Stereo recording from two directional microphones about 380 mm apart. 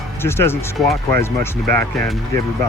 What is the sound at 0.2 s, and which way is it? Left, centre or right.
Speech, centre.